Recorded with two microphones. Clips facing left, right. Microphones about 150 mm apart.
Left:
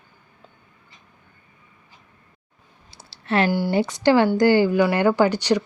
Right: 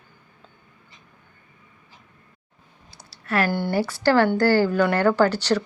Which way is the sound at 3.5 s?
10° left (ahead or behind).